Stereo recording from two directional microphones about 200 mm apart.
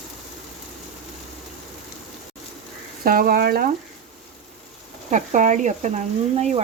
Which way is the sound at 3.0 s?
45° right (ahead or behind).